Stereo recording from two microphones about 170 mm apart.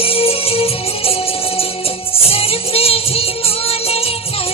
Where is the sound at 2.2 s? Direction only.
35° left (ahead or behind).